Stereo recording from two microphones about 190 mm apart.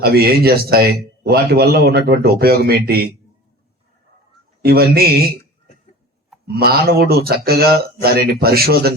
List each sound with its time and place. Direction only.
0.0 s a man's voice: 55° right (ahead or behind)
4.6 s a man's voice: 55° right (ahead or behind)
6.5 s a man's voice: 55° right (ahead or behind)